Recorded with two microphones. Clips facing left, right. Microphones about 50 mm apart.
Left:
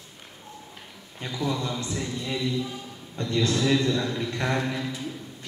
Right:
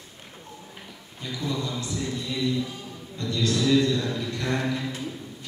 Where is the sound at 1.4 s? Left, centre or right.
Left.